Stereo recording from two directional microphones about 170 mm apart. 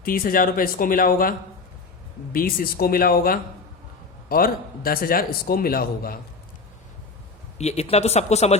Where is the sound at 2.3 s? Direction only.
60° left (ahead or behind).